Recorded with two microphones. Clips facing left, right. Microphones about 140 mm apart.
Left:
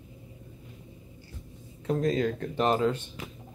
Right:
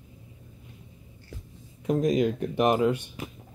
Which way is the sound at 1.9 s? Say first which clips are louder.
Right 3 dB; 15° right (ahead or behind).